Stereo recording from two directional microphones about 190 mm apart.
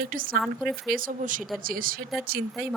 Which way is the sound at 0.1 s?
45° right (ahead or behind).